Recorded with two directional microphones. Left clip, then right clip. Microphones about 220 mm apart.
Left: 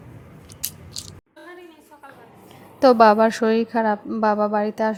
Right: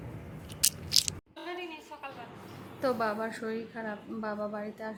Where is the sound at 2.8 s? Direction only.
40° left (ahead or behind).